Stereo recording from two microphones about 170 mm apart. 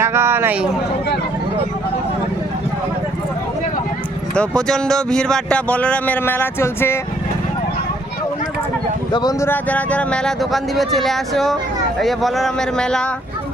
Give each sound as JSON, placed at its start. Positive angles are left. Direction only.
{"t": 0.0, "sound": "speech", "side_deg": -15}
{"t": 4.4, "sound": "speech", "side_deg": 5}
{"t": 9.1, "sound": "speech", "side_deg": 25}
{"t": 9.5, "sound": "speech", "side_deg": 10}